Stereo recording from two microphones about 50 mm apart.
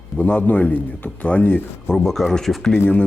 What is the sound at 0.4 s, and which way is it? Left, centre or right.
Speech, left.